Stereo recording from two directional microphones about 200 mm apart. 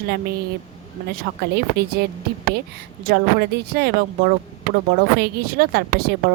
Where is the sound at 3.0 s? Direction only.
55° right (ahead or behind).